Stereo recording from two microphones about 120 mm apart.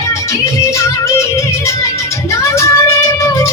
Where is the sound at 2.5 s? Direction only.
25° left (ahead or behind).